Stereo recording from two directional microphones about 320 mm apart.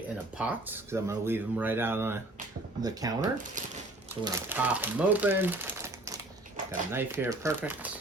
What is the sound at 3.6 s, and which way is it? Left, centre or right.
Speech, right.